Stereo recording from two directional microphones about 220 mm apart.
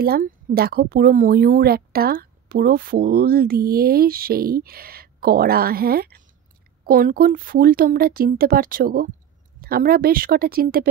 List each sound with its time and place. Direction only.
0.0 s speech: 40° right (ahead or behind)